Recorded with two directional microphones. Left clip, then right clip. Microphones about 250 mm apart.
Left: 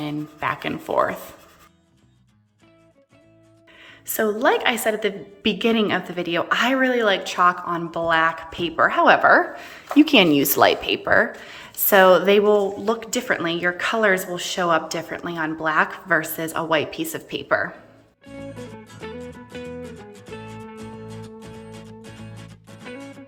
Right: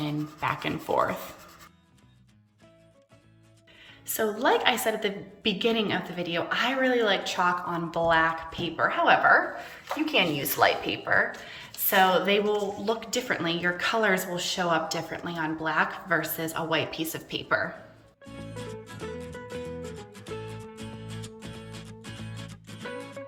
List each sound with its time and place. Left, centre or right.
0.0 s a woman's voice: centre
3.8 s a sound: centre
4.4 s a woman's voice: centre
18.3 s music: centre